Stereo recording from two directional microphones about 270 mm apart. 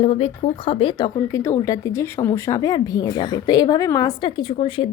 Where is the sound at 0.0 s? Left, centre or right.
Left.